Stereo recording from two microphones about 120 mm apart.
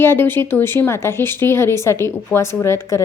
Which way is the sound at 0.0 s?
20° left (ahead or behind).